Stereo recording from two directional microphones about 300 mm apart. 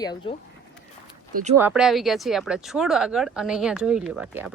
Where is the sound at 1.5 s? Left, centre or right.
Centre.